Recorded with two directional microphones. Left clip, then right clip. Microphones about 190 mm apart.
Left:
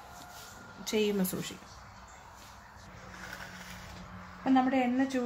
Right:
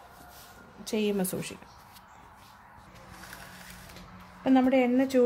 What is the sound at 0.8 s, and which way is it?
Speech, 30° right (ahead or behind).